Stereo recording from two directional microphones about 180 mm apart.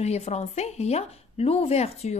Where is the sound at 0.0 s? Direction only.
35° left (ahead or behind).